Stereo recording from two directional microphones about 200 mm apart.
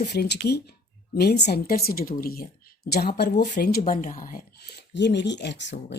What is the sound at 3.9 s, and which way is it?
Speech, 40° left (ahead or behind).